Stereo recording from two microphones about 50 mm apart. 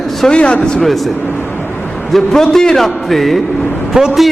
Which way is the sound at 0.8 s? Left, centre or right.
Centre.